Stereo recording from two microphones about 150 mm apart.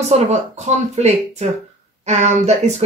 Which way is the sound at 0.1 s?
50° right (ahead or behind).